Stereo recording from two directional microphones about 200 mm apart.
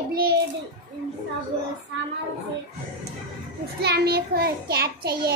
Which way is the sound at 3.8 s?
55° right (ahead or behind).